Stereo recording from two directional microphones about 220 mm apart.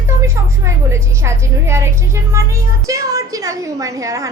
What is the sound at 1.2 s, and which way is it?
A woman's voice, 10° right (ahead or behind).